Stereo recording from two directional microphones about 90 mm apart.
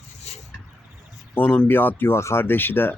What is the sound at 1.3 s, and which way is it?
Speech, 20° left (ahead or behind).